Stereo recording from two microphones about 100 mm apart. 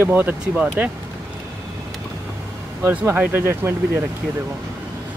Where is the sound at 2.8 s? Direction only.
20° right (ahead or behind).